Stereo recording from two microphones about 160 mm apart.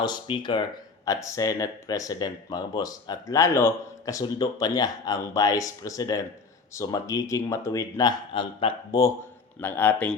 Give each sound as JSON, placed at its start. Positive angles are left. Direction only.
{"t": 0.0, "sound": "speech", "side_deg": 25}
{"t": 8.3, "sound": "speech", "side_deg": 30}
{"t": 9.6, "sound": "a man's voice", "side_deg": 15}